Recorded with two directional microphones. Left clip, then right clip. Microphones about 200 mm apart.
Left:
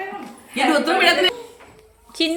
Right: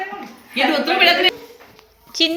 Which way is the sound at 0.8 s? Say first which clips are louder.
Right 4 dB; 55° left (ahead or behind).